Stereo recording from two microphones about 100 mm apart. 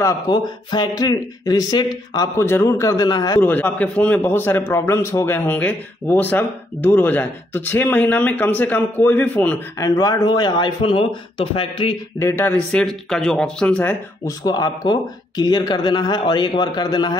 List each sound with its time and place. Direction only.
0.3 s speech: 45° left (ahead or behind)
2.3 s speech: 25° left (ahead or behind); by 3.3 s 40° left (ahead or behind)
3.3 s a man's voice: 20° left (ahead or behind)
9.8 s speech: 35° left (ahead or behind); by 12.0 s 55° left (ahead or behind)
12.2 s a man's voice: 25° left (ahead or behind)
12.5 s speech: 5° left (ahead or behind)
14.2 s speech: 40° left (ahead or behind)